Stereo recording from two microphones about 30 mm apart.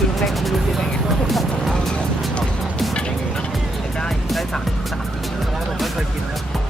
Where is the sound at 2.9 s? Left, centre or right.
Left.